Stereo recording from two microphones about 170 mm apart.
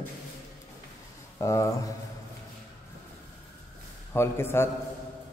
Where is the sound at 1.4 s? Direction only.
20° left (ahead or behind).